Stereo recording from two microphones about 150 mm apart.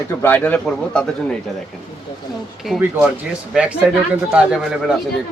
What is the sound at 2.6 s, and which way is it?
A woman's voice, centre (ahead or behind).